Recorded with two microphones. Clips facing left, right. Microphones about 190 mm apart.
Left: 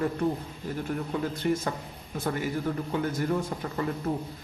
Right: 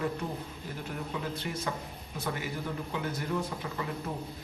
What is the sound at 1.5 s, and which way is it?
Speech, 50° left (ahead or behind).